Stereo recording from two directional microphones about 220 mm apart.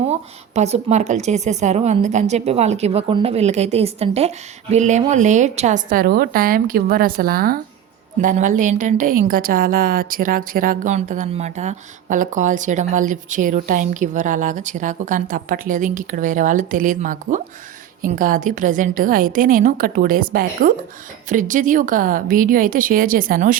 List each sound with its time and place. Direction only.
0.0 s a woman's voice: 30° right (ahead or behind)